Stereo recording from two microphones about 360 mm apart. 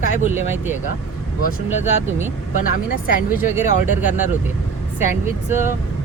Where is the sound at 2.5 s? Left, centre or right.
Left.